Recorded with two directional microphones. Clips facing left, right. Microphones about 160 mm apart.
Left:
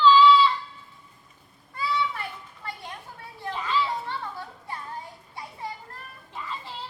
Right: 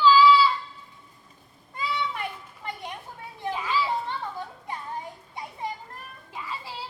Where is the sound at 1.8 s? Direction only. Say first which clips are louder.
Left 2 dB; 20° right (ahead or behind).